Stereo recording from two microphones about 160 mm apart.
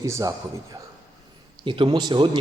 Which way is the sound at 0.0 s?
20° right (ahead or behind).